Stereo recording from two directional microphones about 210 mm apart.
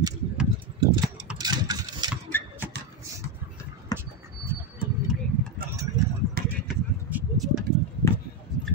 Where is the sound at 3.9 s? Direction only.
10° right (ahead or behind).